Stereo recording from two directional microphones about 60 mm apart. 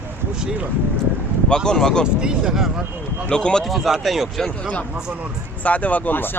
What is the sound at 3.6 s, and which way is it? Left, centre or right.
Speech, centre.